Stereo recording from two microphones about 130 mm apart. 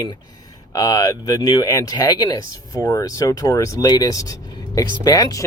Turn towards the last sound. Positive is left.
turn(degrees=30)  # may be behind; listen again after turning